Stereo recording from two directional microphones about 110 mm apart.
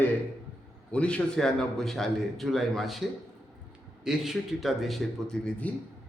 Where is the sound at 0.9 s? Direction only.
10° left (ahead or behind).